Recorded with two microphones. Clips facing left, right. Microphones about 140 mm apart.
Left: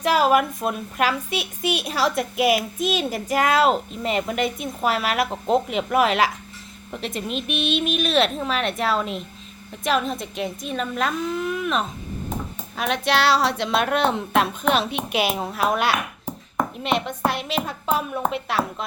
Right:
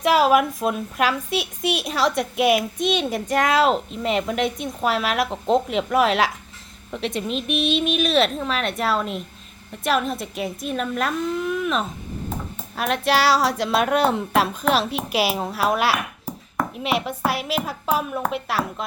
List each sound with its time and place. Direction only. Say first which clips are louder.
0.0 s a woman's voice: right 2 dB; centre (ahead or behind)